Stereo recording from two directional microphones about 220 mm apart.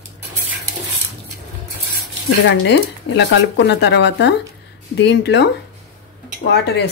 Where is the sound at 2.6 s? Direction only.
55° left (ahead or behind).